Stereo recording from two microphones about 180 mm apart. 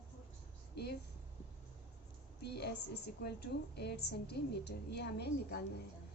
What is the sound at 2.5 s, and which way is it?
A woman's voice, 65° left (ahead or behind).